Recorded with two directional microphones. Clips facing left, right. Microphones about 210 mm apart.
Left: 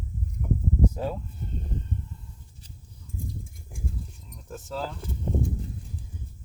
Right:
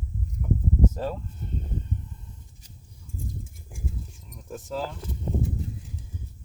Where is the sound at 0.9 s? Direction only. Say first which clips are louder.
Even; 5° left (ahead or behind).